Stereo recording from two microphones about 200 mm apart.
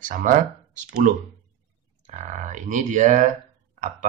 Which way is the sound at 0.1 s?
40° right (ahead or behind).